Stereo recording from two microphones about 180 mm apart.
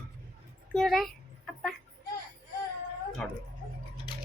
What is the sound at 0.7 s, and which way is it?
Speech, centre (ahead or behind).